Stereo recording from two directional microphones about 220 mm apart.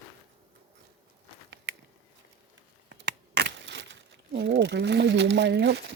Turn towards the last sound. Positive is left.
turn(degrees=-50)  # may be behind; listen again after turning